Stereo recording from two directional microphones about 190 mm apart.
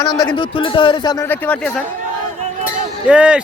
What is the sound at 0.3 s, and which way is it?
A man's voice, 25° left (ahead or behind).